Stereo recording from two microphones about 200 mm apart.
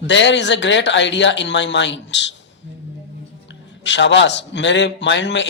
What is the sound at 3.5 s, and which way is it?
A man's voice, 65° left (ahead or behind).